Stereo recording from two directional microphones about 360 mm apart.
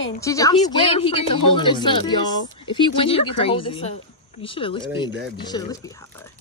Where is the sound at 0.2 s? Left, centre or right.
Centre.